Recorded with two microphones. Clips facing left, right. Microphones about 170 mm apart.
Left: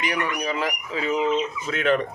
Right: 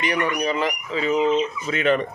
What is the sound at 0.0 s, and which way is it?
Speech, 5° left (ahead or behind).